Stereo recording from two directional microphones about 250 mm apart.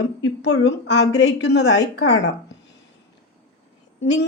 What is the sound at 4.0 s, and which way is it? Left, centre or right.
Speech, left.